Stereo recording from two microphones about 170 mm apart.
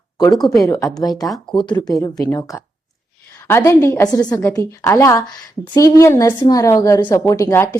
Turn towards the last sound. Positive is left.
turn(degrees=15)  # may be behind; listen again after turning